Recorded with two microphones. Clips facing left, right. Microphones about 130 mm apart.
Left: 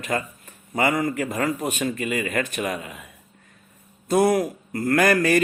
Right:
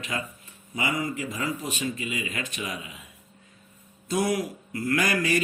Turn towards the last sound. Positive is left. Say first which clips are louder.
# left 6 dB
turn(degrees=50)  # may be behind; listen again after turning